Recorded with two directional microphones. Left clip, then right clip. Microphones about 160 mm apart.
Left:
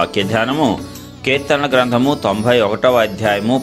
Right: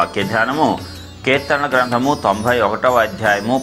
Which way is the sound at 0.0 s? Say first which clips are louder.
Even; 75° left (ahead or behind).